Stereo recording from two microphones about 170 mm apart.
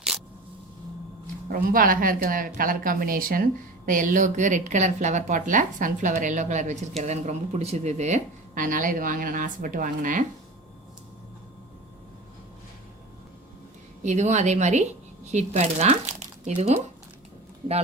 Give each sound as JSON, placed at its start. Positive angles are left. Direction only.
{"t": 1.5, "sound": "speech", "side_deg": -55}
{"t": 14.0, "sound": "speech", "side_deg": -45}